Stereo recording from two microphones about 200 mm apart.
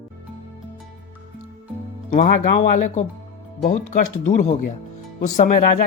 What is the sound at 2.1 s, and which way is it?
Speech, 40° left (ahead or behind).